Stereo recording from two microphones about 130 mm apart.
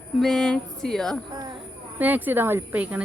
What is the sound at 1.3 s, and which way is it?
Speech, 35° right (ahead or behind).